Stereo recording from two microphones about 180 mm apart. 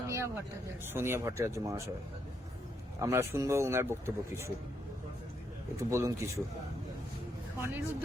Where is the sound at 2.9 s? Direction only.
15° right (ahead or behind).